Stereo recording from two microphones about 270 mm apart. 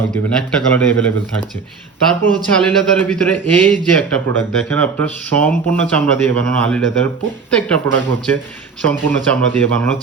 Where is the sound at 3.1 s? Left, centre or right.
Centre.